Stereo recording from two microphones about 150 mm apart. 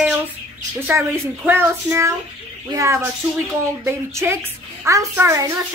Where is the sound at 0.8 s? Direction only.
15° right (ahead or behind).